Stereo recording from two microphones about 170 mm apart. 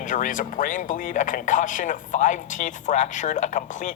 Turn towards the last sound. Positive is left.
turn(degrees=45)  # may be behind; listen again after turning